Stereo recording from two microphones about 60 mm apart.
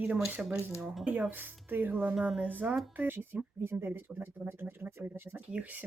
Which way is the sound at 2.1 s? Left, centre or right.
Centre.